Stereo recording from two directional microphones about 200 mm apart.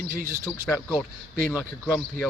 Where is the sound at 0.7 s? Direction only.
15° left (ahead or behind).